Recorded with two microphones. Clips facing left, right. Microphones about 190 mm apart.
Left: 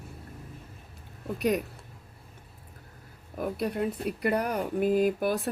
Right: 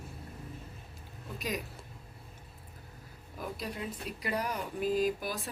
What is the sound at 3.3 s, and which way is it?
Speech, 55° left (ahead or behind).